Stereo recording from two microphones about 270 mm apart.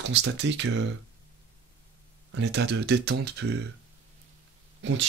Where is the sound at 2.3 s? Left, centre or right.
Right.